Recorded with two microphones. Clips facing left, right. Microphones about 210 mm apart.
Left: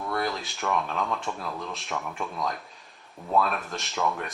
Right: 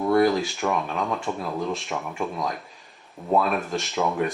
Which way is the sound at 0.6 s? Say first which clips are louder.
Left 1 dB; 15° right (ahead or behind).